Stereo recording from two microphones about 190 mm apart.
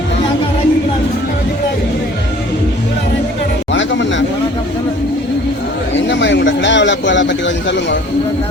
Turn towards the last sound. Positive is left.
turn(degrees=70)  # may be behind; listen again after turning